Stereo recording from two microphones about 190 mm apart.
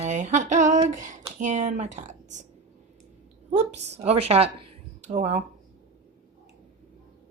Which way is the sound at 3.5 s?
35° right (ahead or behind).